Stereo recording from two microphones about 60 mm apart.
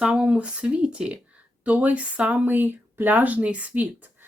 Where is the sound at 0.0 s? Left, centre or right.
Centre.